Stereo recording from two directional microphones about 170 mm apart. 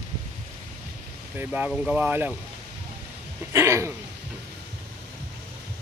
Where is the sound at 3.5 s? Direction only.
15° right (ahead or behind).